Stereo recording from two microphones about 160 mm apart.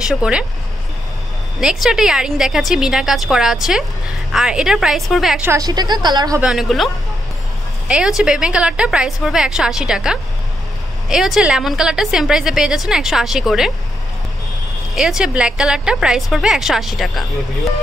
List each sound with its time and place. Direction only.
0.0 s a woman's voice: 5° right (ahead or behind)
1.6 s a woman's voice: 5° right (ahead or behind)
5.5 s a woman's voice: 25° right (ahead or behind)
6.4 s a woman's voice: 5° right (ahead or behind)
7.9 s a woman's voice: 5° right (ahead or behind)
15.0 s a woman's voice: 5° right (ahead or behind)